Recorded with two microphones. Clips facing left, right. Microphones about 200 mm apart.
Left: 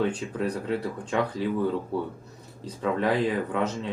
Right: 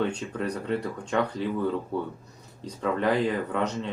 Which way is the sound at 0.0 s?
5° left (ahead or behind).